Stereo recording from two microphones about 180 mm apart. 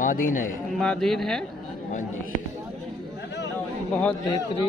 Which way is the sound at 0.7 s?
5° left (ahead or behind).